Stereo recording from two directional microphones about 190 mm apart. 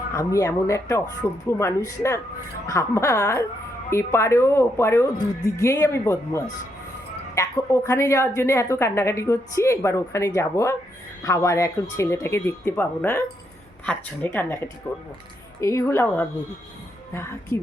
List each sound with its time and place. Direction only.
0.1 s a woman's voice: 15° left (ahead or behind)